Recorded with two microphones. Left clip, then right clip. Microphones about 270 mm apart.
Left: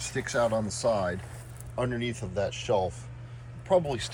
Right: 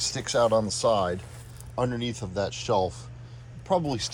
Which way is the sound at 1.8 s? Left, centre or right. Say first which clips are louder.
Right 3 dB; right.